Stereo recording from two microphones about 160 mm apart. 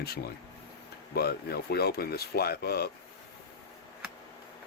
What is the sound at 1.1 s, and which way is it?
Speech, 80° left.